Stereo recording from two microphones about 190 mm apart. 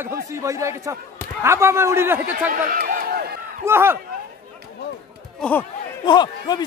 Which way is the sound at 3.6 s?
10° right (ahead or behind).